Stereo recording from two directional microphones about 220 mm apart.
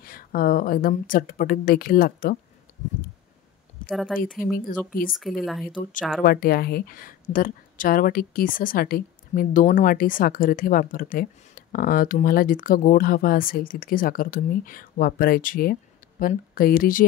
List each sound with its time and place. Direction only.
0.0 s speech: 40° left (ahead or behind)
3.9 s speech: centre (ahead or behind)
4.4 s speech: 40° left (ahead or behind)
5.4 s speech: centre (ahead or behind)
6.2 s speech: 45° left (ahead or behind)